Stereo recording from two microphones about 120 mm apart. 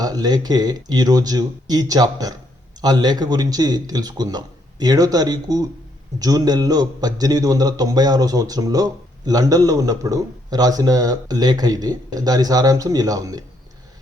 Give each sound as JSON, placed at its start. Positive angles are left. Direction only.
{"t": 0.0, "sound": "a man's voice", "side_deg": -35}